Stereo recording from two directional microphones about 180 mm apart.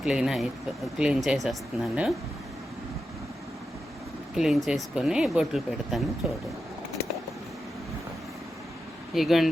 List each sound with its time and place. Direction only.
0.0 s speech: 5° right (ahead or behind)
4.4 s speech: centre (ahead or behind)
9.1 s speech: centre (ahead or behind)